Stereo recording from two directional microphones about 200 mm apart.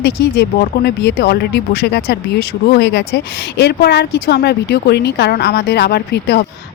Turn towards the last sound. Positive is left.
turn(degrees=55)  # may be behind; listen again after turning